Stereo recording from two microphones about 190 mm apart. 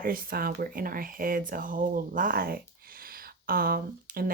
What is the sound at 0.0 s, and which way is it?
Speech, 50° right (ahead or behind).